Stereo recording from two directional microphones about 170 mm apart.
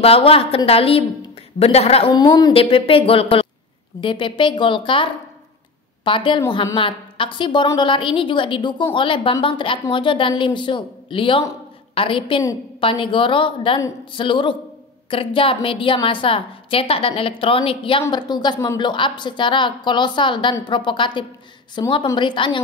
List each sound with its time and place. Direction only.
0.0 s a woman's voice: 35° left (ahead or behind)